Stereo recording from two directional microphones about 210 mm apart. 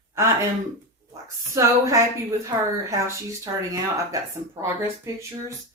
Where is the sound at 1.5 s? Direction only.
15° right (ahead or behind).